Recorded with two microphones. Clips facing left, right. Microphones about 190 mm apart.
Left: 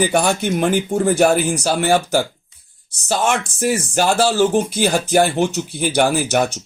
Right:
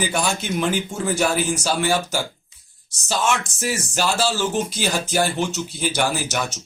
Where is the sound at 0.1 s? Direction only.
60° left (ahead or behind).